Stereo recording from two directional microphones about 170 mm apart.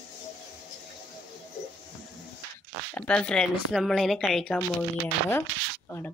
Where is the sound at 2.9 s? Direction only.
5° left (ahead or behind).